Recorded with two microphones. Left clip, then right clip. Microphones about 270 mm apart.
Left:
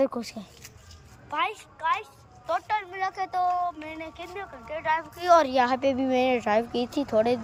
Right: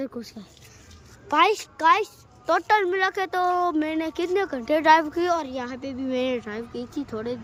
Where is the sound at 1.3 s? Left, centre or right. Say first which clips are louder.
Right 9 dB; centre.